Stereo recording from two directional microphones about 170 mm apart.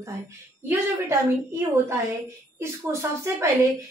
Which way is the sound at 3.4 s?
15° right (ahead or behind).